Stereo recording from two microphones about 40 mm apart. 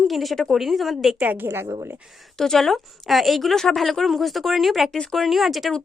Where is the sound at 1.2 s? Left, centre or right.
Right.